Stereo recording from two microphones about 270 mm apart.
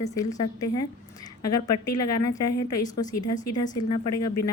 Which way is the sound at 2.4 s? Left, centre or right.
Left.